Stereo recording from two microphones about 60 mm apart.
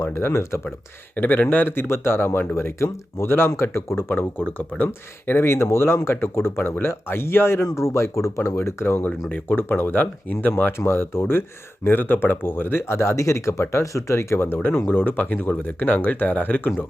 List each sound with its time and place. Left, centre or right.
0.0 s speech: left
1.1 s speech: left
4.4 s speech: left
4.9 s speech: left
9.3 s speech: left
14.4 s speech: left